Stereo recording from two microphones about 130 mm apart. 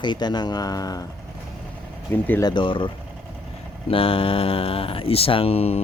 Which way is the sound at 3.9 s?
45° left (ahead or behind).